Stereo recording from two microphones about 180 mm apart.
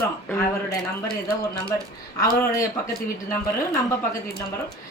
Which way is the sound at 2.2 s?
20° left (ahead or behind).